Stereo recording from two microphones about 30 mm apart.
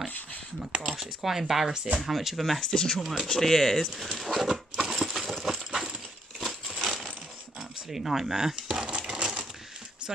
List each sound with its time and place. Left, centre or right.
0.6 s a sound: right
1.2 s speech: centre
2.6 s speech: left
3.0 s speech: centre
3.3 s speech: centre
4.2 s speech: centre
4.5 s a sound: centre
6.8 s coin: centre
7.9 s speech: centre
8.4 s a sound: right
9.0 s coin: right